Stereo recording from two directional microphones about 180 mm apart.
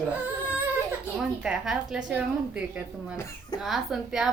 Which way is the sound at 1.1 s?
5° right (ahead or behind).